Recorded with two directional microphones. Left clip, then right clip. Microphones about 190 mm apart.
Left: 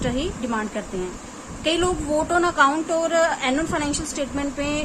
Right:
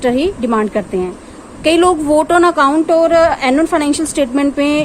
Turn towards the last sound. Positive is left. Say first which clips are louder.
# right 12 dB
turn(degrees=-45)  # may be behind; listen again after turning